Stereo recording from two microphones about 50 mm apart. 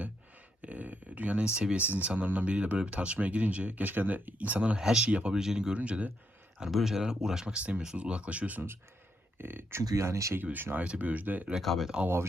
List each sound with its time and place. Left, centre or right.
0.6 s a sound: right
1.5 s speech: right
1.8 s speech: right
4.8 s speech: centre
5.0 s speech: right
5.3 s speech: centre
5.7 s speech: right
6.7 s speech: centre; by 8.6 s right
9.4 s speech: right
10.3 s speech: right
10.8 s speech: right
11.6 s speech: centre